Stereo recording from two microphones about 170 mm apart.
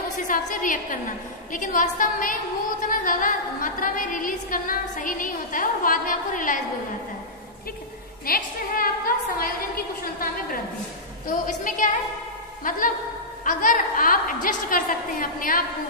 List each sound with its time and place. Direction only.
0.3 s a woman's voice: 50° left (ahead or behind)
8.3 s a woman's voice: 60° left (ahead or behind)
11.4 s a woman's voice: 50° left (ahead or behind)